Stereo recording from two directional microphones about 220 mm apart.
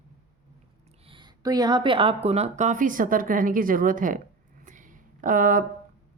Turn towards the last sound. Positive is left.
turn(degrees=-40)  # may be behind; listen again after turning